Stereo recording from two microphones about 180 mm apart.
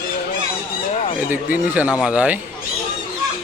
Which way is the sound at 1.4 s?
50° left (ahead or behind).